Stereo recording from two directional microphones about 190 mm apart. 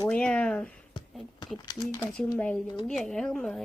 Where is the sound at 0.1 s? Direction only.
5° left (ahead or behind).